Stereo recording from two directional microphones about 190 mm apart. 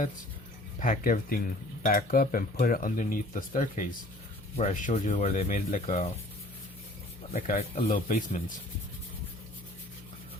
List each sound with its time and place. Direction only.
0.8 s speech: 45° left (ahead or behind)
7.4 s speech: 50° left (ahead or behind)